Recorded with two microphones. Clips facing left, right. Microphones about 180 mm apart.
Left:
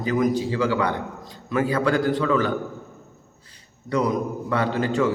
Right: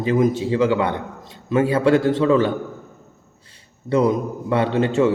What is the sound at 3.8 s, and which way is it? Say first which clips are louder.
A man's voice: right 4 dB; 25° right (ahead or behind).